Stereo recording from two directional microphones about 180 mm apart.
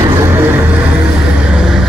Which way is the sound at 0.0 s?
15° right (ahead or behind).